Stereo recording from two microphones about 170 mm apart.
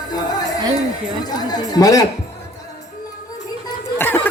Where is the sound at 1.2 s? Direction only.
25° left (ahead or behind).